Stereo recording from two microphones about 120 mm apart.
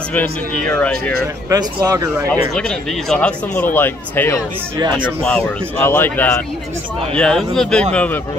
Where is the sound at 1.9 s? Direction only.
30° right (ahead or behind).